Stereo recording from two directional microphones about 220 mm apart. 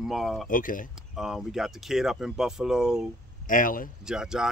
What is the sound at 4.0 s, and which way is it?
Speech, 5° right (ahead or behind).